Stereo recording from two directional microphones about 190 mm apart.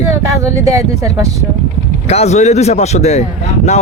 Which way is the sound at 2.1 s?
35° left (ahead or behind).